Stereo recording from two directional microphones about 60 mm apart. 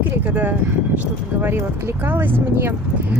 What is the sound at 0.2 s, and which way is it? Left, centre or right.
Speech, right.